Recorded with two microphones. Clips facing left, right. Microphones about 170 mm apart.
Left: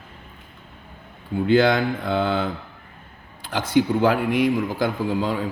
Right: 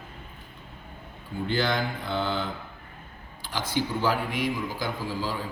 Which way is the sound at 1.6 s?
60° left (ahead or behind).